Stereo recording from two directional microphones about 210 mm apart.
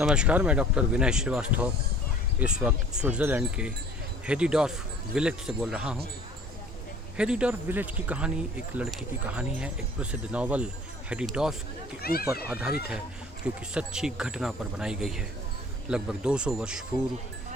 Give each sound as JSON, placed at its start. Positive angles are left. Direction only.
{"t": 0.0, "sound": "speech", "side_deg": -5}
{"t": 7.2, "sound": "speech", "side_deg": -5}
{"t": 12.0, "sound": "speech", "side_deg": 45}
{"t": 12.5, "sound": "speech", "side_deg": -5}